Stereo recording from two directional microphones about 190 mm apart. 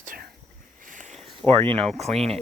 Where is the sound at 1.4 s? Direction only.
30° right (ahead or behind).